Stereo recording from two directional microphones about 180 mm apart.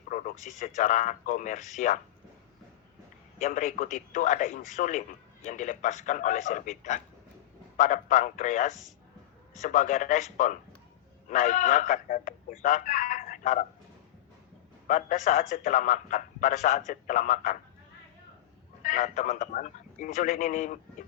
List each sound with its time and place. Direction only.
0.1 s a sound: 45° left (ahead or behind)
0.6 s a man's voice: 45° left (ahead or behind)
3.3 s a man's voice: 45° left (ahead or behind)
14.8 s a man's voice: 45° left (ahead or behind)
18.8 s speech: 45° left (ahead or behind)